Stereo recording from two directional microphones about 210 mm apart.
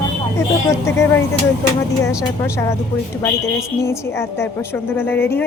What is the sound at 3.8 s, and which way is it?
A woman's voice, 10° left (ahead or behind).